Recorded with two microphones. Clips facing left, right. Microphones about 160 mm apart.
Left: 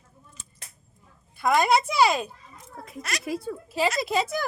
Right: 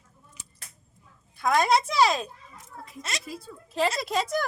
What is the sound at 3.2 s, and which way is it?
Speech, 70° left (ahead or behind).